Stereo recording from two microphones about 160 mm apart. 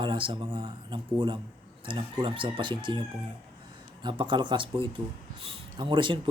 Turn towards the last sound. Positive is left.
turn(degrees=-30)  # may be behind; listen again after turning